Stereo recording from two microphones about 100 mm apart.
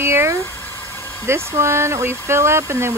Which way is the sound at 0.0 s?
25° right (ahead or behind).